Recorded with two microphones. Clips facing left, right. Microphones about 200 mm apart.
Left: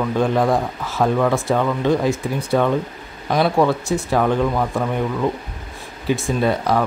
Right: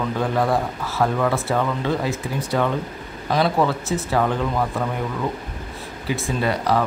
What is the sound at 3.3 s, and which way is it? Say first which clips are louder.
Speech: left 3 dB; 15° left (ahead or behind).